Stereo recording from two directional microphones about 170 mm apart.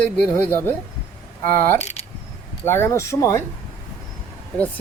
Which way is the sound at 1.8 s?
40° left (ahead or behind).